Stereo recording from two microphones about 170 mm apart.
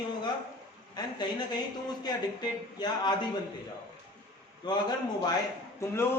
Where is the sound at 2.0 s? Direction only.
25° left (ahead or behind).